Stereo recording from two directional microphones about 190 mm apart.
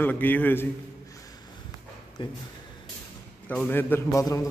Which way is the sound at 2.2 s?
25° left (ahead or behind).